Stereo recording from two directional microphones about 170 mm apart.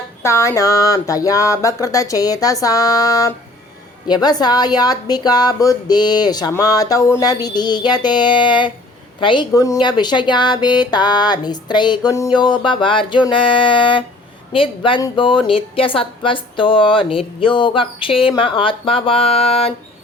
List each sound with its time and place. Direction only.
0.2 s a woman's voice: 15° left (ahead or behind); by 19.7 s 35° left (ahead or behind)